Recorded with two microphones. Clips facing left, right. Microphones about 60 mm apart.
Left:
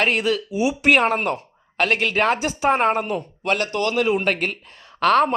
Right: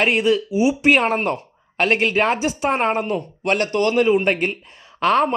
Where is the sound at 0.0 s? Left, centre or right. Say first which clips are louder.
Right 3 dB; centre.